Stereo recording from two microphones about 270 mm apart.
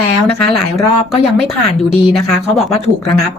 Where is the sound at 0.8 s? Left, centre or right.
Left.